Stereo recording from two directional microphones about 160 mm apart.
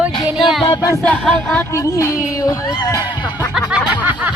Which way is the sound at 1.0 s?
10° left (ahead or behind).